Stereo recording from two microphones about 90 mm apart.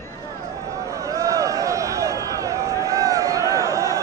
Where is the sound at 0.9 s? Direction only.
35° right (ahead or behind).